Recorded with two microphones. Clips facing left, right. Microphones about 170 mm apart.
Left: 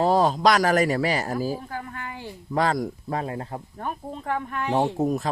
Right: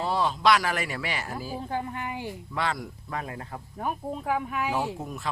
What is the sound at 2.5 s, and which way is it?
Speech, 40° left (ahead or behind).